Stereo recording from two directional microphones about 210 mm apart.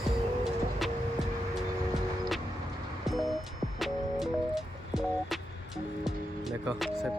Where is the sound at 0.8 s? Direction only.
Centre (ahead or behind).